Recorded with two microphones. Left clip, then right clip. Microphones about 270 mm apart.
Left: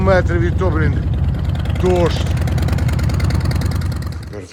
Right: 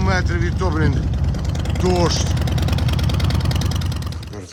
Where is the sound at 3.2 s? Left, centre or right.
Right.